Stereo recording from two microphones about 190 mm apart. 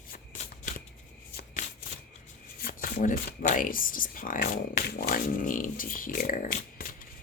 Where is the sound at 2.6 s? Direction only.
50° left (ahead or behind).